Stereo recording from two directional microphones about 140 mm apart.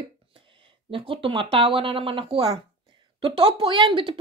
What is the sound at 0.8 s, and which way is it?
Speech, 40° right (ahead or behind).